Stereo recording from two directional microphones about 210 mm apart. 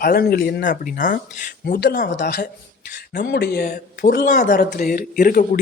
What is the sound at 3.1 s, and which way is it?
Speech, 45° left (ahead or behind).